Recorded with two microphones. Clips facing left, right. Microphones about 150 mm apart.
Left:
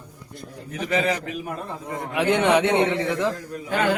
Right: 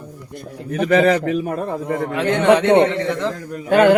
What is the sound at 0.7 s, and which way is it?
A man's voice, 60° right (ahead or behind).